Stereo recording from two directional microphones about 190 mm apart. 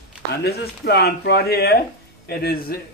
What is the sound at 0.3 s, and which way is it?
A man's voice, 60° left (ahead or behind).